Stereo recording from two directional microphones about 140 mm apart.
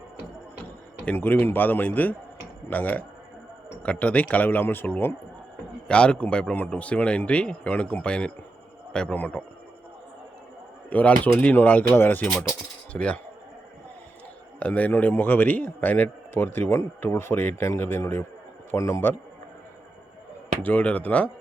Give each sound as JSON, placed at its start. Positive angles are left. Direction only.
{"t": 0.6, "sound": "a man's voice", "side_deg": 10}
{"t": 10.8, "sound": "a man's voice", "side_deg": 10}
{"t": 14.6, "sound": "a man's voice", "side_deg": 10}
{"t": 20.6, "sound": "a man's voice", "side_deg": 10}